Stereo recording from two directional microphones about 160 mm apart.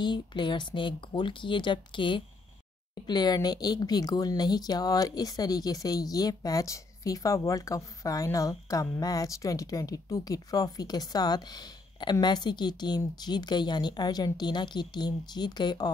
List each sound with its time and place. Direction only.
0.0 s speech: 30° left (ahead or behind)